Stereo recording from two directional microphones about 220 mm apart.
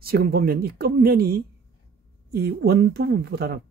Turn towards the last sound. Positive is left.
turn(degrees=-45)  # may be behind; listen again after turning